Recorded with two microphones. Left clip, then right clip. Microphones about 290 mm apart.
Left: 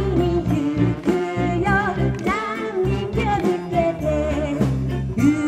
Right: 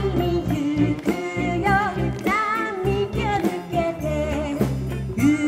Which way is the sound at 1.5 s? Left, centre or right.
Right.